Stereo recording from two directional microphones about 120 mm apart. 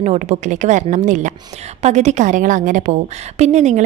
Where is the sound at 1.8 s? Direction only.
70° right (ahead or behind).